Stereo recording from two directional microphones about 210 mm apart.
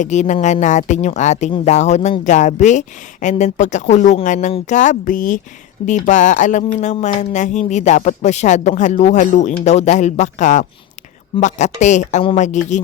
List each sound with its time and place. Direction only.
0.0 s speech: 35° left (ahead or behind)